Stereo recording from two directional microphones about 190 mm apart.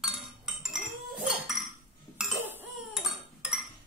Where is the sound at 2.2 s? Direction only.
5° right (ahead or behind).